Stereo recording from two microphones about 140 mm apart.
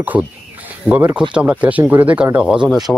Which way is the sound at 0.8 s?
10° right (ahead or behind).